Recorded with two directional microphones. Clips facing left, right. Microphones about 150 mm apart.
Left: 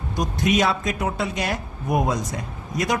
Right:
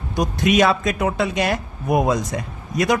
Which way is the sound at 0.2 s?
85° right.